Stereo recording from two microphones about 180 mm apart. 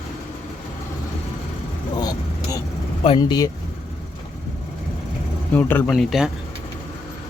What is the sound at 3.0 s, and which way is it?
Speech, 25° left (ahead or behind).